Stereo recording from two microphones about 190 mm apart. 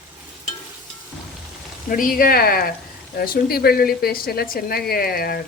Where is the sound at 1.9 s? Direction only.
45° left (ahead or behind).